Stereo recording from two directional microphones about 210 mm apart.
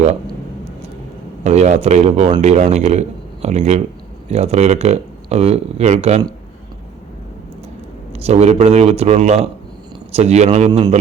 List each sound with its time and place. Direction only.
1.5 s speech: 35° right (ahead or behind)
8.1 s speech: 30° right (ahead or behind)